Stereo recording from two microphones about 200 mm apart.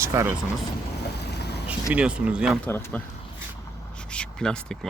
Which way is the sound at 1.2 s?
55° left (ahead or behind).